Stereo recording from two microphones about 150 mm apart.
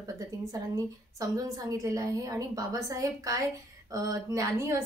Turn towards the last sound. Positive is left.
turn(degrees=-20)  # may be behind; listen again after turning